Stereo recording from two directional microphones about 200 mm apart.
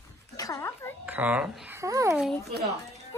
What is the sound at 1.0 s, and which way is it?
Babbling, 10° right (ahead or behind).